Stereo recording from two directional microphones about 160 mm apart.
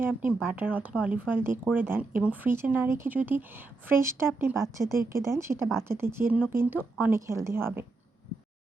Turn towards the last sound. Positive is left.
turn(degrees=-15)  # may be behind; listen again after turning